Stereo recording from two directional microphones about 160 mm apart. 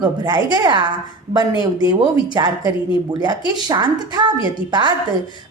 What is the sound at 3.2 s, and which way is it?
A woman's voice, 25° right (ahead or behind).